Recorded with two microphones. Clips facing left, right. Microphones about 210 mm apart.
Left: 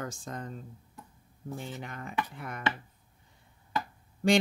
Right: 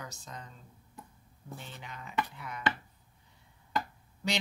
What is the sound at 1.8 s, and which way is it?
Speech, 50° left (ahead or behind).